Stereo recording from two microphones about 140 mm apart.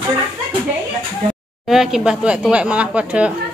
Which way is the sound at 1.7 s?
5° right (ahead or behind).